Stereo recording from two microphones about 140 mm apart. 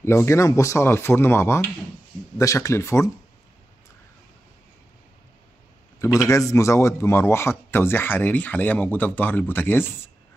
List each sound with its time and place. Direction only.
0.0 s speech: 20° left (ahead or behind)
5.9 s a man's voice: 20° left (ahead or behind)